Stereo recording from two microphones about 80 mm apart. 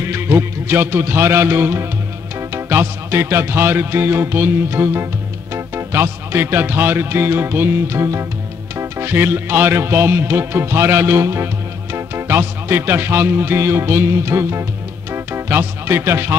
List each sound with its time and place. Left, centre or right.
0.0 s music: right